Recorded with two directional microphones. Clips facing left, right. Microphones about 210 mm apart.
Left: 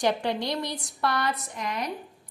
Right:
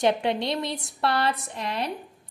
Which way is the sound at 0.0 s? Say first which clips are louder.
Right 3 dB; 25° right (ahead or behind).